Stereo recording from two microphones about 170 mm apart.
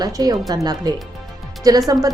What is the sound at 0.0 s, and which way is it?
Speech, 25° right (ahead or behind).